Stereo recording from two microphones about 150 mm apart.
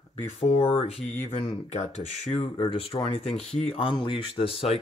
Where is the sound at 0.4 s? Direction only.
40° left (ahead or behind).